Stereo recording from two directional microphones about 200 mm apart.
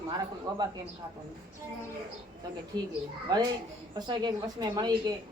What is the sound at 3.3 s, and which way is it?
A woman's voice, 20° right (ahead or behind).